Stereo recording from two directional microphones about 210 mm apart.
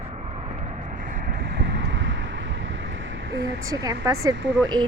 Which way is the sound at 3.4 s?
15° right (ahead or behind).